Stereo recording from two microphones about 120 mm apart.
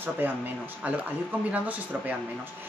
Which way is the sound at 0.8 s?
15° right (ahead or behind).